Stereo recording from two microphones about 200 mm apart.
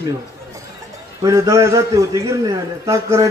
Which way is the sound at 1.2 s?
15° right (ahead or behind).